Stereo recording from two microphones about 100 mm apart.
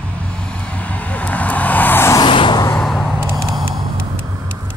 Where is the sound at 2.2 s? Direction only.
55° left (ahead or behind).